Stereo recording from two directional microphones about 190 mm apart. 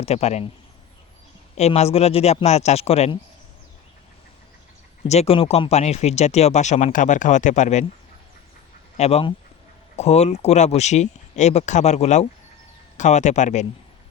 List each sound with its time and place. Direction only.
0.0 s speech: 35° left (ahead or behind)
1.5 s speech: 35° left (ahead or behind)
5.0 s speech: 35° left (ahead or behind)
9.0 s speech: 35° left (ahead or behind)